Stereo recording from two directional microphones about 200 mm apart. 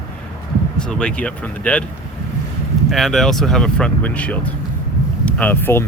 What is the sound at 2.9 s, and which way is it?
Speech, centre (ahead or behind).